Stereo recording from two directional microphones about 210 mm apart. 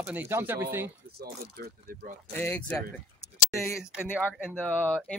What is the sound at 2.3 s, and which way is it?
Speech, 10° left (ahead or behind).